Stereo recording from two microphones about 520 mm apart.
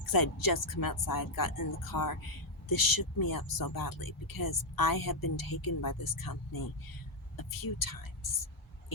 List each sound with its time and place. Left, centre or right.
0.1 s speech: left